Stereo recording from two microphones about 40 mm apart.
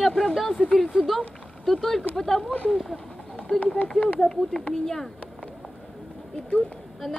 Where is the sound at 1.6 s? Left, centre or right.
Centre.